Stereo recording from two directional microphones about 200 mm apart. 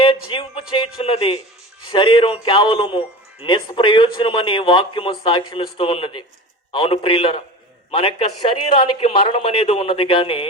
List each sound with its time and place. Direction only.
0.3 s a man's voice: 25° left (ahead or behind)